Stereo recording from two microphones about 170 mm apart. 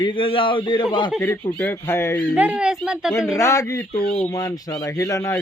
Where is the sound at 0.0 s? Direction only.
30° left (ahead or behind).